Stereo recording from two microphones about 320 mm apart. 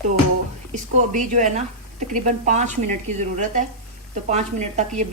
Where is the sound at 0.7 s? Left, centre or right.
Right.